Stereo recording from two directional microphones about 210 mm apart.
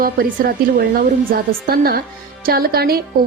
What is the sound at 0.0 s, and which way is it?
A woman's voice, 45° right (ahead or behind).